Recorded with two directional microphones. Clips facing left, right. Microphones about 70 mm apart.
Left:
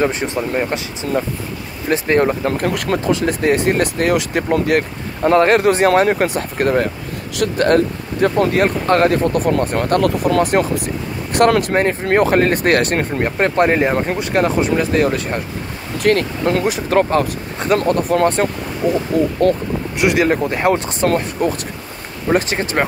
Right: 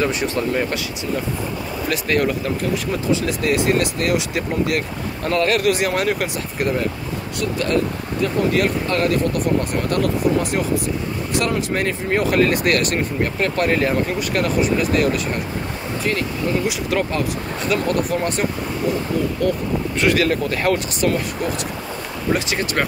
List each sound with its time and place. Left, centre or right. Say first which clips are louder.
0.0 s speech: left 2 dB; left
1.9 s speech: left 5 dB; left
2.6 s speech: left 4 dB; left
3.3 s speech: left 3 dB; left
7.3 s speech: left 6 dB; left
8.5 s speech: left 5 dB; left
9.8 s speech: left 4 dB; left
16.0 s speech: left 8 dB; left
16.6 s speech: left 5 dB; left
18.8 s speech: left 5 dB; left
19.4 s speech: left 5 dB; left
20.0 s speech: left 3 dB; centre
21.1 s speech: left 5 dB; left
22.6 s speech: left 3 dB; left